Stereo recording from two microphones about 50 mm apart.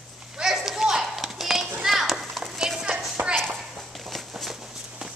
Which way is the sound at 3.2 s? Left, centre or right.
Right.